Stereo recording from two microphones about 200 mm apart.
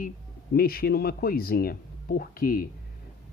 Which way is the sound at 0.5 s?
50° left (ahead or behind).